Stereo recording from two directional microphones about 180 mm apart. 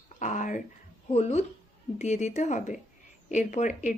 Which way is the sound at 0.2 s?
45° left (ahead or behind).